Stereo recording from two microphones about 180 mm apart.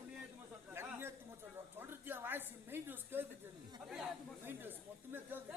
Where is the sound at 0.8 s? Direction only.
15° right (ahead or behind).